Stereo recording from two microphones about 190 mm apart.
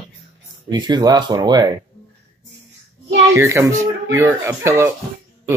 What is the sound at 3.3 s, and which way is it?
Speech, 15° right (ahead or behind).